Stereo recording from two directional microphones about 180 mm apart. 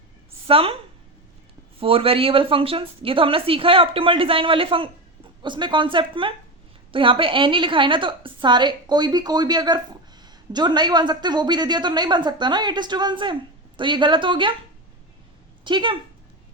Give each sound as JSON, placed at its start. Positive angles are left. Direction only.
{"t": 0.4, "sound": "a woman's voice", "side_deg": -30}
{"t": 1.8, "sound": "a woman's voice", "side_deg": -30}
{"t": 15.6, "sound": "a woman's voice", "side_deg": -25}